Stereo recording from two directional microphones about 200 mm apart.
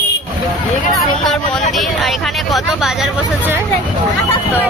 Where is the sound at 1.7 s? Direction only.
Centre (ahead or behind).